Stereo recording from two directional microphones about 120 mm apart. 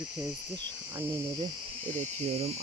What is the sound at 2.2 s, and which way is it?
Speech, 60° right (ahead or behind).